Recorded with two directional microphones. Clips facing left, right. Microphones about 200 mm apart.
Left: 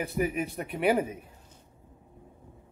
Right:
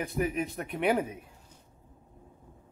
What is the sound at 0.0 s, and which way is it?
Speech, 5° left (ahead or behind).